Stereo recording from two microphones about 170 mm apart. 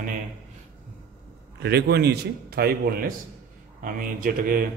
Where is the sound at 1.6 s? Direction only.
70° right (ahead or behind).